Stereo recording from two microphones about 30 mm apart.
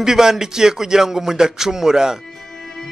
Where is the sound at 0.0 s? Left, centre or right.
Centre.